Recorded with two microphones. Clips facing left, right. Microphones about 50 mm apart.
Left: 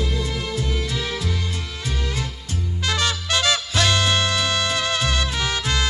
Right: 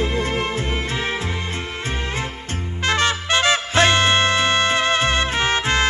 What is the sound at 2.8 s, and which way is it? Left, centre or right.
Music, right.